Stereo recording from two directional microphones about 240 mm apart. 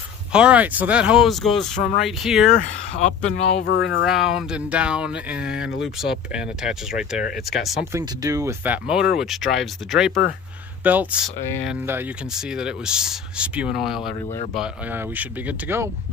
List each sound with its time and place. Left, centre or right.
0.3 s speech: centre
2.9 s speech: left
3.6 s speech: left
4.1 s speech: centre
7.9 s speech: centre